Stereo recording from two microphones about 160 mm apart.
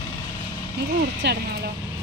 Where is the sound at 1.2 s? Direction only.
90° right.